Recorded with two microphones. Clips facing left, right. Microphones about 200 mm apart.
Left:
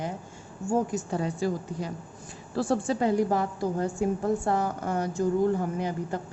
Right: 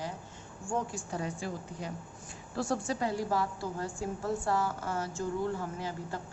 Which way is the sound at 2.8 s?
20° left (ahead or behind).